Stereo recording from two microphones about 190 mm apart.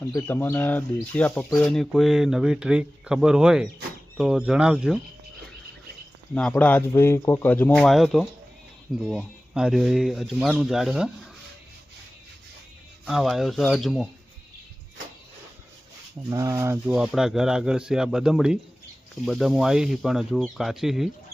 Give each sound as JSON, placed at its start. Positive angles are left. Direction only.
{"t": 0.0, "sound": "speech", "side_deg": 20}
{"t": 6.5, "sound": "speech", "side_deg": 10}
{"t": 13.1, "sound": "speech", "side_deg": 0}
{"t": 16.3, "sound": "speech", "side_deg": -15}